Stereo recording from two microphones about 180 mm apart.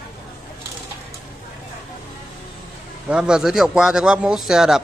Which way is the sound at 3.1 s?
5° right (ahead or behind).